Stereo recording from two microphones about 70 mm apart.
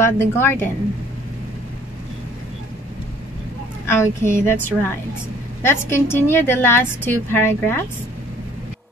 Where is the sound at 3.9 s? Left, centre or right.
Left.